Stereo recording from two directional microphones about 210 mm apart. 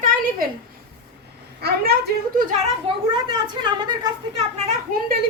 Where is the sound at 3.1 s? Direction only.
20° right (ahead or behind).